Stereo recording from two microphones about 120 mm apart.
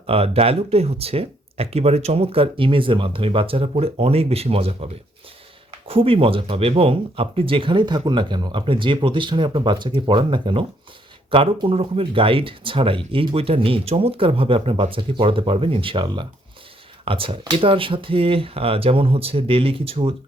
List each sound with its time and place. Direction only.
0.1 s speech: 55° right (ahead or behind)
5.9 s speech: 50° right (ahead or behind)